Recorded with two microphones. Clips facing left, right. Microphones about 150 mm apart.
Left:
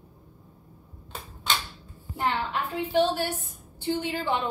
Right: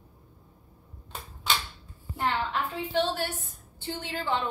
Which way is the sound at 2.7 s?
15° left (ahead or behind).